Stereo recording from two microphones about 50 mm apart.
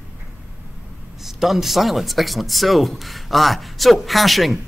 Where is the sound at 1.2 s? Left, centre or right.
Centre.